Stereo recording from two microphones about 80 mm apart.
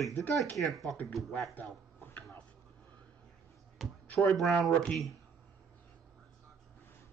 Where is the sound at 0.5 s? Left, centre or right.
Centre.